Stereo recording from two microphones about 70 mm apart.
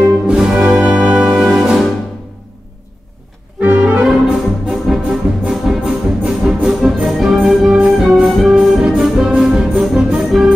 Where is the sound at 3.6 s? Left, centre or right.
Right.